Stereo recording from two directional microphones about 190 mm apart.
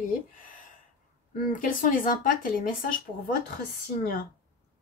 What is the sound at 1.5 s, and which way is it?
Speech, 45° left (ahead or behind).